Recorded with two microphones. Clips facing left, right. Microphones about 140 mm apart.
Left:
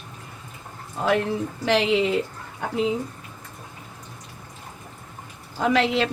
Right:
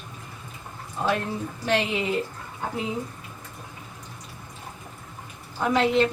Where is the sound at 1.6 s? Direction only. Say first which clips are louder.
Left 4 dB; 90° left.